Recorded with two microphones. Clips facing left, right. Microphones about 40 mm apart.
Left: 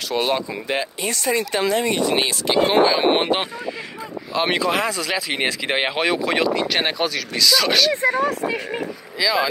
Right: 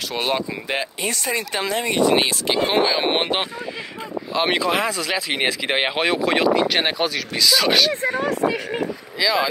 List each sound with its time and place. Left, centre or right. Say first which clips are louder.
0.1 s speech: left 2 dB; centre
2.5 s speech: left 4 dB; centre
9.2 s speech: even; centre